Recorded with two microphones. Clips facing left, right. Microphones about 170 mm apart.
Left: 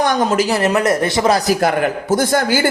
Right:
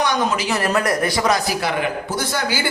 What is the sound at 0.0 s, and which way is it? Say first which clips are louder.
Speech: left 5 dB; 50° left (ahead or behind).